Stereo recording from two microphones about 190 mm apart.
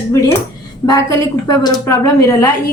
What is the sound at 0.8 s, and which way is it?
A woman's voice, 20° left (ahead or behind).